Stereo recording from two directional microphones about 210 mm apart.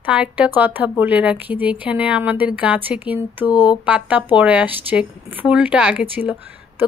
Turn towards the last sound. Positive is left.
turn(degrees=-5)  # may be behind; listen again after turning